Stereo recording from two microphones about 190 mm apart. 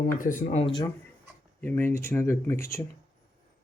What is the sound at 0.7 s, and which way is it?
Speech, 20° left (ahead or behind).